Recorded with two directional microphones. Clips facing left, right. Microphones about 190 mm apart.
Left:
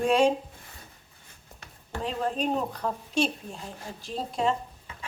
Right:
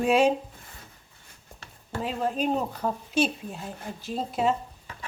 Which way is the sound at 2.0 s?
5° right (ahead or behind).